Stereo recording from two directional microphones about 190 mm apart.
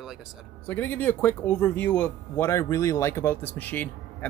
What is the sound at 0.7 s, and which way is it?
Speech, 10° left (ahead or behind).